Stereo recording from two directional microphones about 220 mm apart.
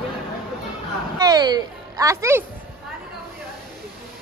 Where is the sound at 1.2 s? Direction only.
20° right (ahead or behind).